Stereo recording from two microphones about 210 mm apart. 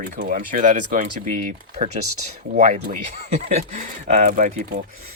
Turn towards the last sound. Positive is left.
turn(degrees=-35)  # may be behind; listen again after turning